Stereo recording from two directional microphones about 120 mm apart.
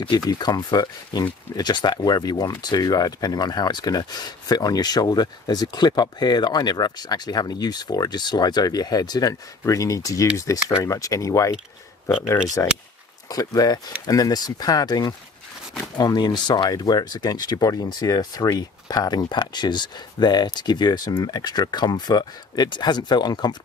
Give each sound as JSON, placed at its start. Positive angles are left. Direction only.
{"t": 0.0, "sound": "speech", "side_deg": 35}
{"t": 12.6, "sound": "speech", "side_deg": 20}